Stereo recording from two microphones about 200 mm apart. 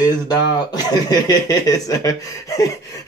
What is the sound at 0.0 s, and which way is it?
Speech, 20° left (ahead or behind).